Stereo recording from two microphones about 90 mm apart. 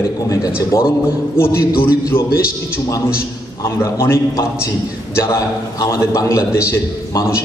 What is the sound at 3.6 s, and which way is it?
A man's voice, 30° left (ahead or behind).